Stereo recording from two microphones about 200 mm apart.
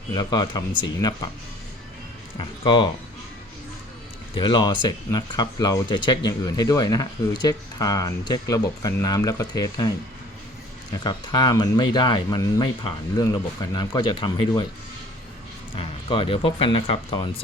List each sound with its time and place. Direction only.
0.1 s speech: 20° left (ahead or behind)
2.4 s speech: 25° left (ahead or behind)
4.4 s speech: 20° left (ahead or behind)
11.0 s speech: 20° left (ahead or behind)
15.7 s speech: 25° left (ahead or behind)